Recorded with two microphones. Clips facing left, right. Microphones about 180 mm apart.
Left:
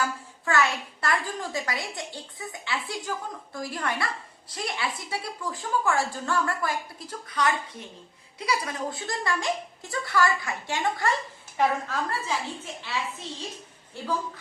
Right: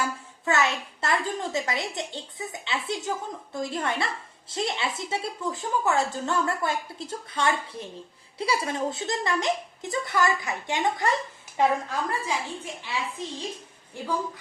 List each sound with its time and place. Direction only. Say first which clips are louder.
0.0 s a child's voice: even; 20° right (ahead or behind)